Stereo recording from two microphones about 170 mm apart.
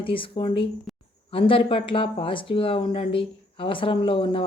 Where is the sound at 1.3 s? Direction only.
30° left (ahead or behind).